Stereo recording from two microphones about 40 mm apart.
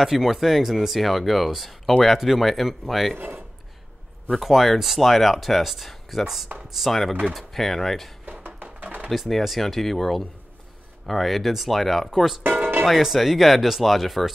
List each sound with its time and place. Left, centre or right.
0.0 s speech: centre
3.2 s speech: right
4.4 s speech: centre
6.9 s speech: centre
8.3 s a sound: right
9.4 s speech: centre